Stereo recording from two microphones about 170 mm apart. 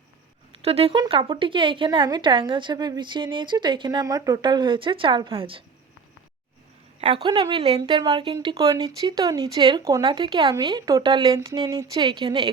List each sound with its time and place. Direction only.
0.6 s speech: 35° right (ahead or behind)
7.0 s a woman's voice: 30° right (ahead or behind)